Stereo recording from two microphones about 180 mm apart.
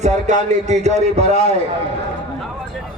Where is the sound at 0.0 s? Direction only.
40° right (ahead or behind).